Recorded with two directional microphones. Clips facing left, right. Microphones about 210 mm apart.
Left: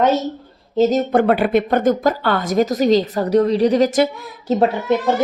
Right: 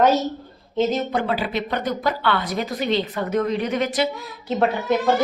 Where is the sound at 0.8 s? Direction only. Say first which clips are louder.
Left 6 dB; 40° left (ahead or behind).